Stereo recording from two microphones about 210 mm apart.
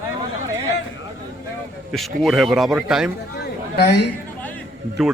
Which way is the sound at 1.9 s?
Centre (ahead or behind).